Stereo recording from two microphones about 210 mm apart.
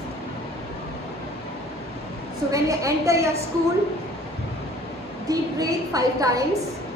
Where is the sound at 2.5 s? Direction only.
15° right (ahead or behind).